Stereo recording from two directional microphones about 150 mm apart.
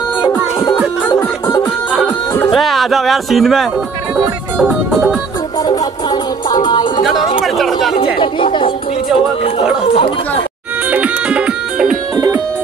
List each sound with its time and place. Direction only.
0.6 s music: 20° left (ahead or behind)
2.5 s speech: centre (ahead or behind)
4.6 s music: 5° right (ahead or behind)
5.7 s music: 30° left (ahead or behind)
7.4 s speech: centre (ahead or behind)
7.9 s speech: 35° left (ahead or behind)
10.9 s music: 10° right (ahead or behind)